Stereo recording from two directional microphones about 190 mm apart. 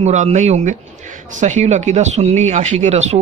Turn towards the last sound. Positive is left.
turn(degrees=-35)  # may be behind; listen again after turning